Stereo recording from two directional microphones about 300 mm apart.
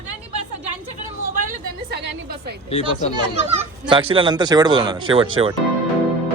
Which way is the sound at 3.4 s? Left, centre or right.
Centre.